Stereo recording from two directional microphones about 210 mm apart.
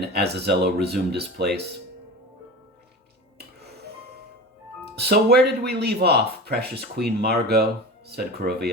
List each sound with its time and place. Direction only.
0.1 s speech: 50° right (ahead or behind)
3.3 s dishes: 50° right (ahead or behind)
4.9 s speech: 50° right (ahead or behind)